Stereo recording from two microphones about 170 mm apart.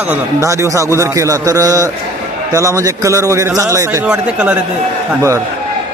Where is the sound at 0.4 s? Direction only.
20° right (ahead or behind).